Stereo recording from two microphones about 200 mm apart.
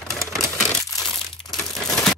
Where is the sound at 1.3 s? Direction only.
Centre (ahead or behind).